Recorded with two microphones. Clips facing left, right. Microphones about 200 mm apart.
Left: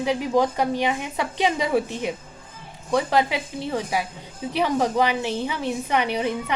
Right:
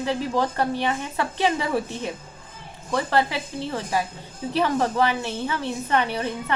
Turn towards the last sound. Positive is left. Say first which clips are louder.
# left 1 dB
turn(degrees=15)  # may be behind; listen again after turning